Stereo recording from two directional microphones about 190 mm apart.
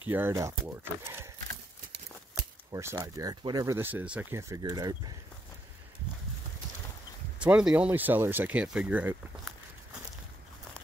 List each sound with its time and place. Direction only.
0.1 s speech: 15° right (ahead or behind)
2.7 s speech: 15° right (ahead or behind)
7.3 s speech: 5° right (ahead or behind)